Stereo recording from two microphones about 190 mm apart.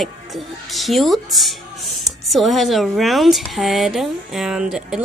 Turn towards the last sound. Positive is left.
turn(degrees=-5)  # may be behind; listen again after turning